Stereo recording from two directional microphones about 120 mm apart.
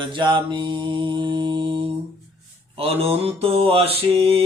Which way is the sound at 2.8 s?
55° right (ahead or behind).